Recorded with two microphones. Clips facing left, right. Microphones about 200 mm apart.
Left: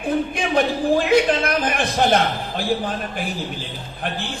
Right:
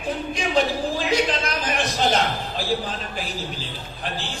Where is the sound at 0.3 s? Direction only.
55° left (ahead or behind).